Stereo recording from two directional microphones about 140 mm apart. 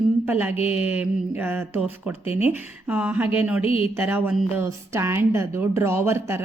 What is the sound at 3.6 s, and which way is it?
Speech, 40° left (ahead or behind).